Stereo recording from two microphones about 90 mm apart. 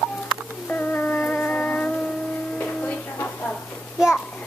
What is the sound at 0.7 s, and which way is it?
Music, 20° left (ahead or behind).